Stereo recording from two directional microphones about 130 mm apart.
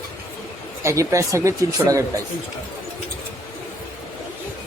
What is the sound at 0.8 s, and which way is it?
Speech, 25° right (ahead or behind).